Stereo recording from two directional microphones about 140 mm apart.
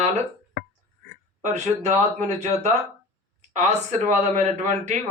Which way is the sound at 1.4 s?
55° right (ahead or behind).